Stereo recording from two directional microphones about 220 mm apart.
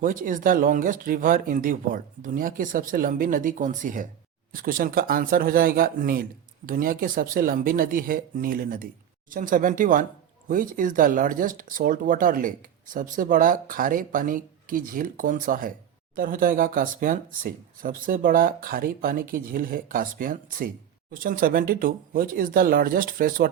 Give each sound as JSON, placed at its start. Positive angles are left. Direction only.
{"t": 0.0, "sound": "speech", "side_deg": -40}